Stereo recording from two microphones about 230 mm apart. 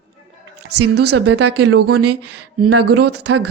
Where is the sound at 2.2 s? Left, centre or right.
Right.